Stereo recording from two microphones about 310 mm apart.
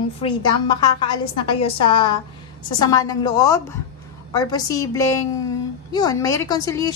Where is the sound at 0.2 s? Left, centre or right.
Centre.